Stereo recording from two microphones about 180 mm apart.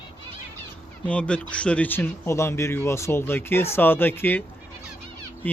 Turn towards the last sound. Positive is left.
turn(degrees=10)  # may be behind; listen again after turning